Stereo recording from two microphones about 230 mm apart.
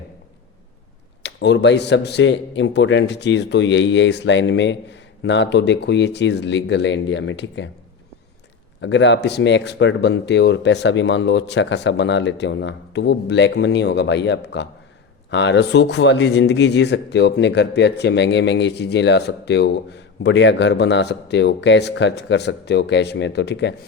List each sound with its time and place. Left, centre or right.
1.2 s a man's voice: left
8.8 s a man's voice: left